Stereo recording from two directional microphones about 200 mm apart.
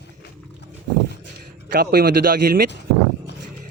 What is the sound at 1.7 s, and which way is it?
Speech, 50° right (ahead or behind).